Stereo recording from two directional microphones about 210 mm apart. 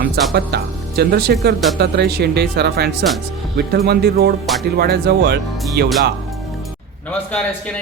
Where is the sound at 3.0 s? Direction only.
Centre (ahead or behind).